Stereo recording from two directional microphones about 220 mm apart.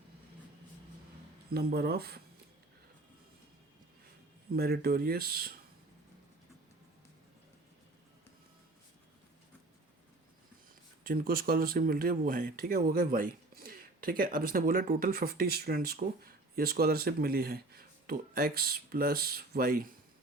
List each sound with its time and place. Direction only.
1.5 s speech: 45° right (ahead or behind)
4.5 s speech: 45° right (ahead or behind)
11.0 s speech: 40° right (ahead or behind)